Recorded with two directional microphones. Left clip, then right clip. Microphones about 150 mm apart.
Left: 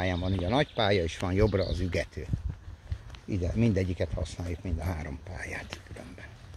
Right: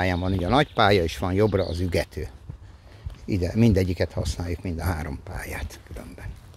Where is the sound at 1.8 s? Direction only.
40° right (ahead or behind).